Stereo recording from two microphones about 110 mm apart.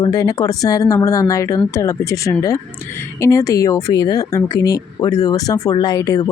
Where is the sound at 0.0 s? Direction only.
35° left (ahead or behind).